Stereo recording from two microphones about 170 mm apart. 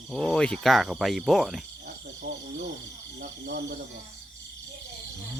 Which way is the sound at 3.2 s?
90° right.